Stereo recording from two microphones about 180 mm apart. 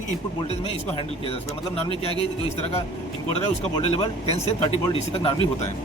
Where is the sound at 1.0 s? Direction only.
30° left (ahead or behind).